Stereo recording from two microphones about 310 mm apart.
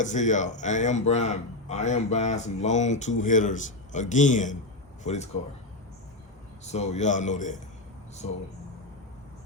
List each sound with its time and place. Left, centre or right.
0.0 s a man's voice: left
6.7 s a man's voice: left